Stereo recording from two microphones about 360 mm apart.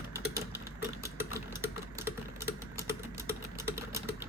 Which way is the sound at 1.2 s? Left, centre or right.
Centre.